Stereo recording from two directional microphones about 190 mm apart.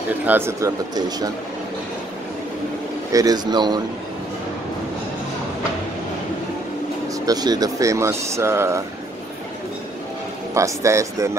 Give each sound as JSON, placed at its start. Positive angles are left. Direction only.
{"t": 0.2, "sound": "speech", "side_deg": -10}
{"t": 3.1, "sound": "speech", "side_deg": -20}
{"t": 7.2, "sound": "speech", "side_deg": -20}
{"t": 10.5, "sound": "speech", "side_deg": -15}